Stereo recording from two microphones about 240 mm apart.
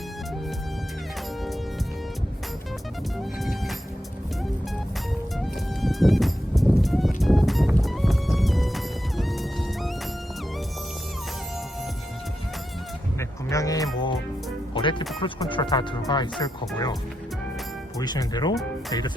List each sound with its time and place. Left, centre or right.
3.2 s music: centre
5.4 s music: centre
13.1 s music: centre
16.4 s speech: centre
18.0 s speech: centre